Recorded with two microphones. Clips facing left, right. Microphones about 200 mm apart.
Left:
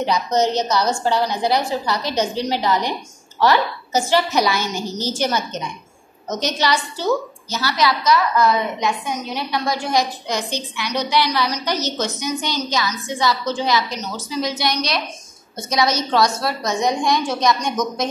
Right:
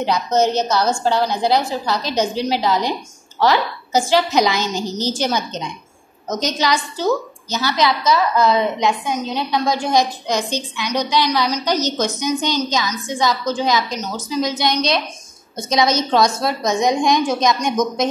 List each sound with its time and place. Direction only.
0.0 s a woman's voice: 10° right (ahead or behind)